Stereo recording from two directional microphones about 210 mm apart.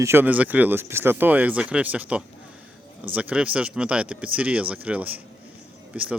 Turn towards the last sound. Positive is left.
turn(degrees=-5)  # may be behind; listen again after turning